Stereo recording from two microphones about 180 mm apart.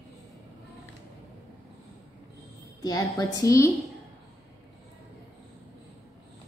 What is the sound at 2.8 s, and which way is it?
Speech, 20° left (ahead or behind).